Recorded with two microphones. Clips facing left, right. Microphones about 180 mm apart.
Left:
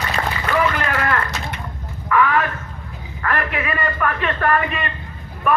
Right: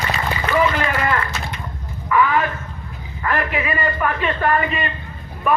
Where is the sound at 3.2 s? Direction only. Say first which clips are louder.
Right 1 dB; 10° right (ahead or behind).